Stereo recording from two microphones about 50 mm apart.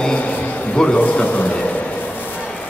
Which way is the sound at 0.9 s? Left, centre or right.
Left.